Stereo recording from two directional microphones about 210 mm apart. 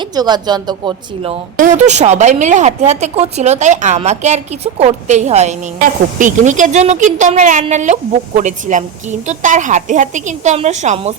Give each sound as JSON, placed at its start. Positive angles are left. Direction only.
{"t": 0.2, "sound": "a woman's voice", "side_deg": -20}
{"t": 1.5, "sound": "a woman's voice", "side_deg": -35}